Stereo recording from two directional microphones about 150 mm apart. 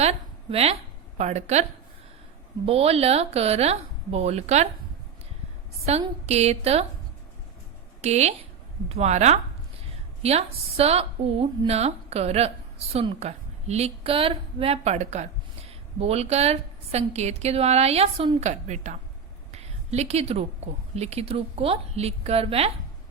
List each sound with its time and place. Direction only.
0.0 s a sound: 45° right (ahead or behind)
1.2 s a woman's voice: 45° right (ahead or behind)
2.6 s a woman's voice: 40° right (ahead or behind)
5.9 s a woman's voice: 45° right (ahead or behind)
8.0 s a woman's voice: 45° right (ahead or behind)
19.5 s a sound: 45° right (ahead or behind)
20.9 s a woman's voice: 45° right (ahead or behind)